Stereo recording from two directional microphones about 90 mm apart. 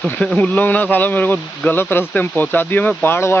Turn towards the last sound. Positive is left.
turn(degrees=25)  # may be behind; listen again after turning